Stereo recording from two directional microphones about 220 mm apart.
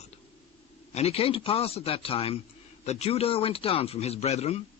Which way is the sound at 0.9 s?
25° left (ahead or behind).